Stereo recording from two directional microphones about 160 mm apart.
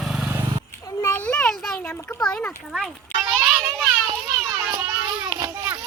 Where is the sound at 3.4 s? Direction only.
10° right (ahead or behind).